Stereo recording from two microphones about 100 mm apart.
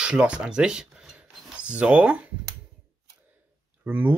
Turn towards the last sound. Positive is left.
turn(degrees=-20)  # may be behind; listen again after turning